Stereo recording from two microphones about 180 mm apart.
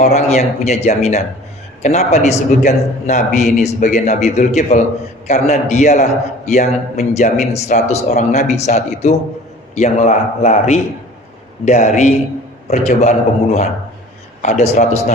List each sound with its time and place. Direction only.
0.0 s a man's voice: 35° left (ahead or behind)